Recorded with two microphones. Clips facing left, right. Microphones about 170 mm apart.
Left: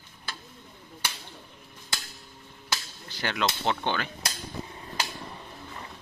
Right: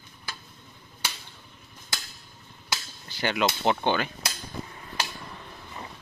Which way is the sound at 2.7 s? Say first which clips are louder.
Even; 5° right (ahead or behind).